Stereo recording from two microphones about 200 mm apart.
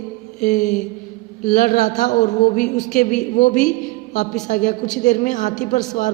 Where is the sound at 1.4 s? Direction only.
40° left (ahead or behind).